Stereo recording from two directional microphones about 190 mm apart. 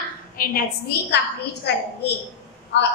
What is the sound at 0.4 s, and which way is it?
Speech, 55° left (ahead or behind).